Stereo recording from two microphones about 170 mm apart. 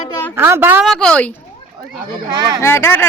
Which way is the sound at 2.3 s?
20° right (ahead or behind).